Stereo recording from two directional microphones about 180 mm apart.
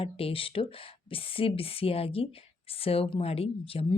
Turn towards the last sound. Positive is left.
turn(degrees=30)  # may be behind; listen again after turning